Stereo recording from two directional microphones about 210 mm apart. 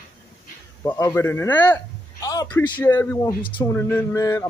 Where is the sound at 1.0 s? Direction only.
10° left (ahead or behind).